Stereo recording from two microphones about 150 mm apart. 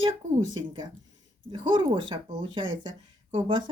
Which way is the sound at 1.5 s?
35° right (ahead or behind).